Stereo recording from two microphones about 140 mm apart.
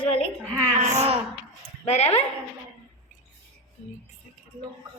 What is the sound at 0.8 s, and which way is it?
Speech, 50° right (ahead or behind).